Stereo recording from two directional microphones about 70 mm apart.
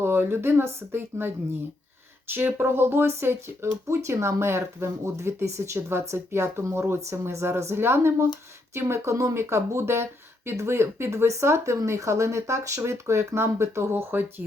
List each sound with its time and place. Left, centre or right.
0.0 s speech: right
2.3 s speech: right